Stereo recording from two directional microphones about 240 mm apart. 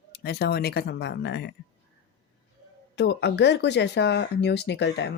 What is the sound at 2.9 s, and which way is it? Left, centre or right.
Speech, left.